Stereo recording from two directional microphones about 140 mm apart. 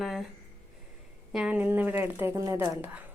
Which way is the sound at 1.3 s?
10° right (ahead or behind).